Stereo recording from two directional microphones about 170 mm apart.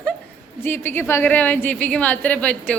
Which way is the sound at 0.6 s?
15° left (ahead or behind).